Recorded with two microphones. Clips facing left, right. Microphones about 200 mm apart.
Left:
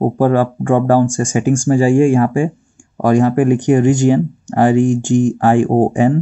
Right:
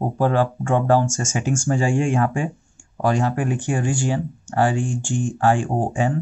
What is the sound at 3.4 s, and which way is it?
Speech, 10° left (ahead or behind).